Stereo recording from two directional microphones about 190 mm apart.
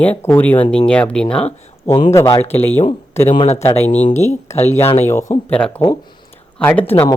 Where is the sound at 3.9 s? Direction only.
35° left (ahead or behind).